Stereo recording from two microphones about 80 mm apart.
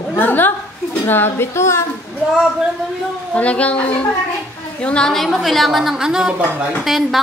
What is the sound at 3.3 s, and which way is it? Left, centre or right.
A woman's voice, centre.